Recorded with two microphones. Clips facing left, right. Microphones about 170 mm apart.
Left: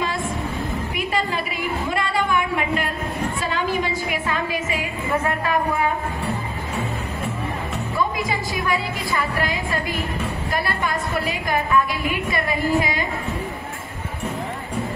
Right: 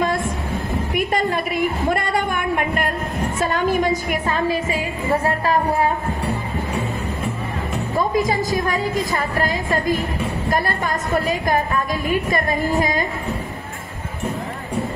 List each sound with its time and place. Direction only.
0.0 s music: 45° right (ahead or behind)
0.9 s a sound: 50° right (ahead or behind)
3.3 s a woman's voice: 50° right (ahead or behind)
7.9 s a woman's voice: 40° right (ahead or behind)